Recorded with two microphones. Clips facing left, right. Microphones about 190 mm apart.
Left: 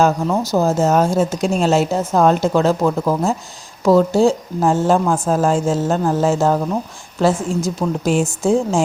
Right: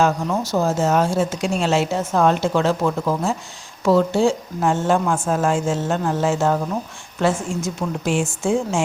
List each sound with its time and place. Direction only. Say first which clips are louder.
0.0 s speech: left 3 dB; 40° left (ahead or behind)